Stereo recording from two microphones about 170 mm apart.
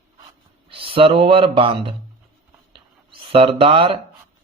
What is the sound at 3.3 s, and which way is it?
Speech, 30° right (ahead or behind).